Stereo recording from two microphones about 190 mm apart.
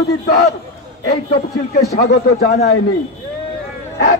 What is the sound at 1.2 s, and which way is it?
A man's voice, 55° left (ahead or behind).